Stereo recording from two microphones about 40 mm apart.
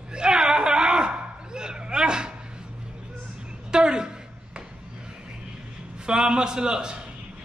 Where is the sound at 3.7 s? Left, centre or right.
Centre.